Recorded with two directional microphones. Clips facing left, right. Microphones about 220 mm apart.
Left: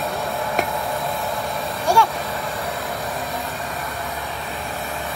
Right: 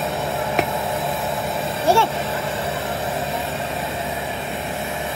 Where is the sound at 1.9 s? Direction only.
30° right (ahead or behind).